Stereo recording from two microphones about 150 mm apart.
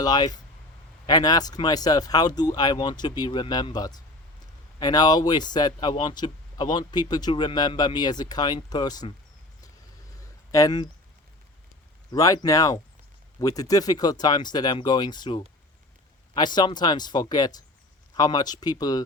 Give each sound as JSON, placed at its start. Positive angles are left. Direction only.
{"t": 0.0, "sound": "speech", "side_deg": 25}
{"t": 10.5, "sound": "speech", "side_deg": 25}
{"t": 12.1, "sound": "speech", "side_deg": 25}